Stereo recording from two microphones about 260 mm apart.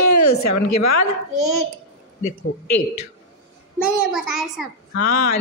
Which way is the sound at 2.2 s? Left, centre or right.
Left.